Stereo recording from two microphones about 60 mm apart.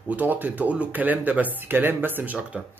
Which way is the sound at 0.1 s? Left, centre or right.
Right.